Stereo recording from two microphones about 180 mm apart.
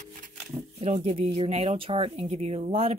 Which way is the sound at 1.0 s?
35° right (ahead or behind).